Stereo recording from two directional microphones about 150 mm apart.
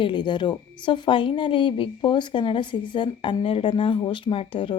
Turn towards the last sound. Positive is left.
turn(degrees=35)  # may be behind; listen again after turning